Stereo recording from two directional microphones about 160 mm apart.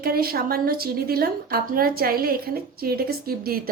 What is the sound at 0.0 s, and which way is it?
A woman's voice, 70° right (ahead or behind).